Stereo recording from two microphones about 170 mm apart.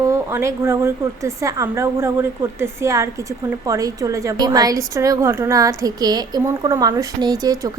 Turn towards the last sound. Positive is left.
turn(degrees=-20)  # may be behind; listen again after turning